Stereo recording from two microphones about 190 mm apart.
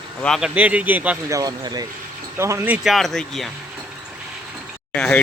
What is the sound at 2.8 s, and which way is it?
Speech, centre (ahead or behind).